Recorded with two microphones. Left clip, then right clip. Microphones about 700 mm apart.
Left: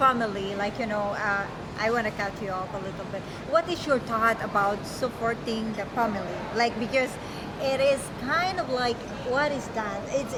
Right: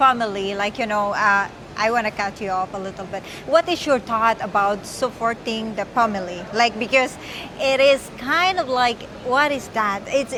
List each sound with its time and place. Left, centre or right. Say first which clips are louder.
0.0 s speech: right 6 dB; right
6.6 s speech: right 8 dB; right